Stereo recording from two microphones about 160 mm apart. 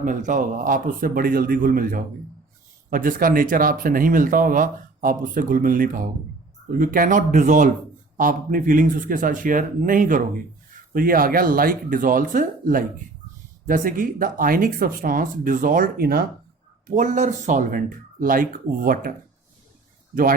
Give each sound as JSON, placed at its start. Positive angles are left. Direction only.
{"t": 0.0, "sound": "speech", "side_deg": -55}
{"t": 16.8, "sound": "speech", "side_deg": -50}